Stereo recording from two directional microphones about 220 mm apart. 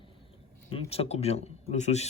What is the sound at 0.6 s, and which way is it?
Speech, 25° left (ahead or behind).